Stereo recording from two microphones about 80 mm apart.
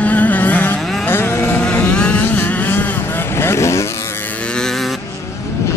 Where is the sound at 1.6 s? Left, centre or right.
Centre.